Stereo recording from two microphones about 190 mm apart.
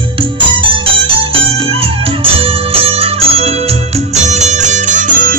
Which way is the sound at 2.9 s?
30° right (ahead or behind).